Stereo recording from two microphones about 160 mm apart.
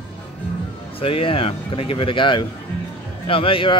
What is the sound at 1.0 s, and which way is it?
Speech, 35° left (ahead or behind).